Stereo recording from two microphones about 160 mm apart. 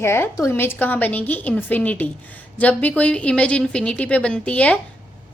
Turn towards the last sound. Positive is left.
turn(degrees=10)  # may be behind; listen again after turning